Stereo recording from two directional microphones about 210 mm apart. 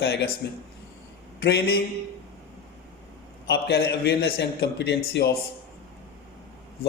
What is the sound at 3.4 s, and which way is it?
Speech, 50° left (ahead or behind).